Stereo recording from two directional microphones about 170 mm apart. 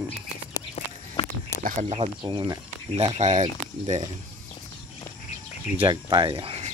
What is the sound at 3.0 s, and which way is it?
Speech, 45° right (ahead or behind).